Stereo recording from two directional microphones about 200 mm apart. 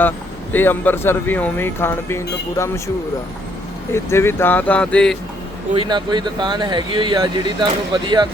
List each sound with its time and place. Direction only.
0.5 s speech: 10° left (ahead or behind)
3.9 s speech: 10° left (ahead or behind)
5.7 s speech: 25° right (ahead or behind)